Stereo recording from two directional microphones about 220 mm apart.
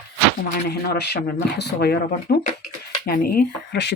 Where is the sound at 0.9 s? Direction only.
45° left (ahead or behind).